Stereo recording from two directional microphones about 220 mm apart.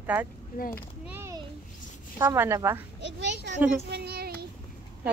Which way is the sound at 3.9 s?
45° right (ahead or behind).